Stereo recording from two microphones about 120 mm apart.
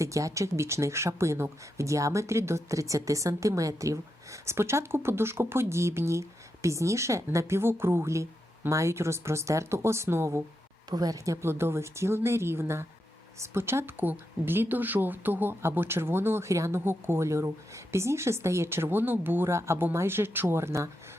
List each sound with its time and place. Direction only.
0.0 s speech: 25° right (ahead or behind)